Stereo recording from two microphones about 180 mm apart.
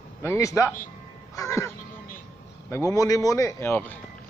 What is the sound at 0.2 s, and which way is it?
A man's voice, 15° left (ahead or behind).